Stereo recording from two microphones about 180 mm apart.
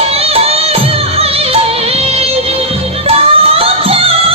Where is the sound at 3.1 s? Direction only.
30° right (ahead or behind).